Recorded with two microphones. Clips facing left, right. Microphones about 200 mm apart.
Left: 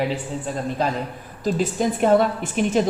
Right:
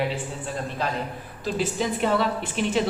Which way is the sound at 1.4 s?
45° left (ahead or behind).